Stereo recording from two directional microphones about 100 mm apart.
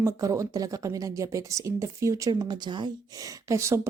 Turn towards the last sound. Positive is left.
turn(degrees=-30)  # may be behind; listen again after turning